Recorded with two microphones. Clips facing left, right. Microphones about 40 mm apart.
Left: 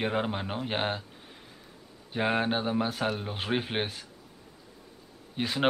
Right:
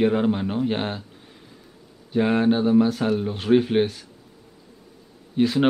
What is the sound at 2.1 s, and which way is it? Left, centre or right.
Speech, centre.